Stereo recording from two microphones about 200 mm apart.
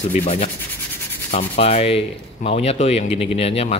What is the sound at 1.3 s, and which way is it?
Sanding, 30° left (ahead or behind).